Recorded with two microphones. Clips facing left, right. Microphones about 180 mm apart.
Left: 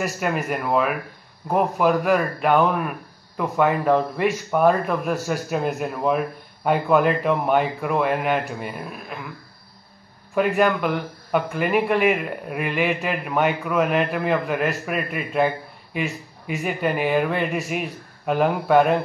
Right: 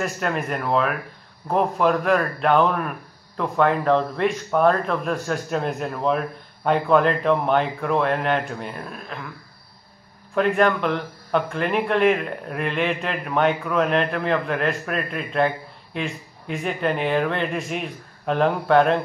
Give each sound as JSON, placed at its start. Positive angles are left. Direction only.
{"t": 0.0, "sound": "a man's voice", "side_deg": 5}
{"t": 10.3, "sound": "a man's voice", "side_deg": 5}